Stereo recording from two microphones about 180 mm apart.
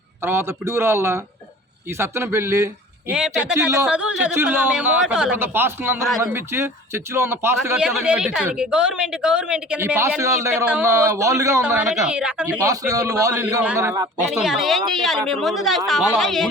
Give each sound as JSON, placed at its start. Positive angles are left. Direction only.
{"t": 0.2, "sound": "speech", "side_deg": -15}
{"t": 7.8, "sound": "a woman's voice", "side_deg": -5}
{"t": 11.6, "sound": "speech", "side_deg": -5}
{"t": 14.3, "sound": "a woman's voice", "side_deg": 0}